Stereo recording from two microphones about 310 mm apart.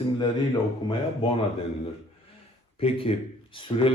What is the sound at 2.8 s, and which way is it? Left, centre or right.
A man's voice, centre.